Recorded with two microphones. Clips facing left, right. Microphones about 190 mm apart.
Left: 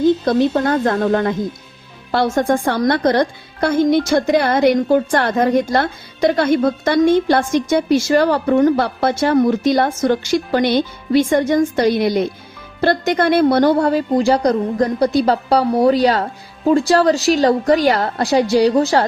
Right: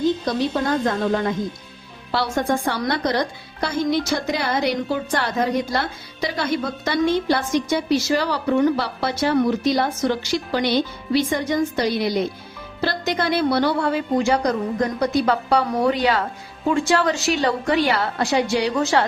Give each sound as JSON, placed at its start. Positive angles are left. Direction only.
{"t": 0.0, "sound": "a woman's voice", "side_deg": 55}